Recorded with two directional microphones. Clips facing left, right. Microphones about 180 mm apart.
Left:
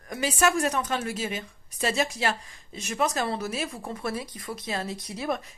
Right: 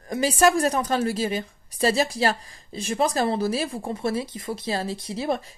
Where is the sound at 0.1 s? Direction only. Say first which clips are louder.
Right 5 dB; 35° right (ahead or behind).